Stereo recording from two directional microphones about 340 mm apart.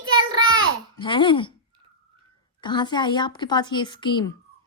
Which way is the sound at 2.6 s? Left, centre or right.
Centre.